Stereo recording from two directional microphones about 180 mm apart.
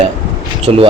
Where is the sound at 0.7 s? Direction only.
30° right (ahead or behind).